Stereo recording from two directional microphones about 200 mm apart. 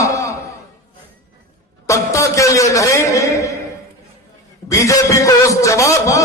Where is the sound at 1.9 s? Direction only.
15° left (ahead or behind).